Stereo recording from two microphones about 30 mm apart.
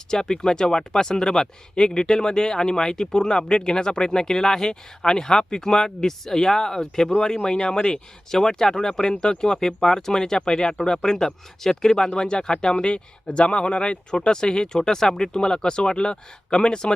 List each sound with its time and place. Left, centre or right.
0.1 s speech: left
8.3 s speech: centre; by 14.0 s left
14.1 s speech: left